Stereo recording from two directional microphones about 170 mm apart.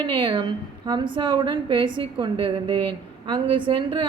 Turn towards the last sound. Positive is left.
turn(degrees=-30)  # may be behind; listen again after turning